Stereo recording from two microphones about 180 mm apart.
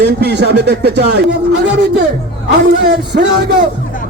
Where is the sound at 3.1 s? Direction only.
60° right (ahead or behind).